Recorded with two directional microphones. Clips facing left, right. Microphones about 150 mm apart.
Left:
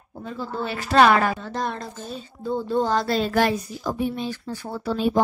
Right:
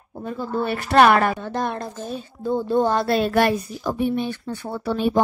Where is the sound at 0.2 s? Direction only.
55° right (ahead or behind).